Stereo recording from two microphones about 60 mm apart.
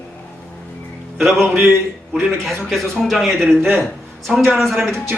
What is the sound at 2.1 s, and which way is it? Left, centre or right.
A man's voice, centre.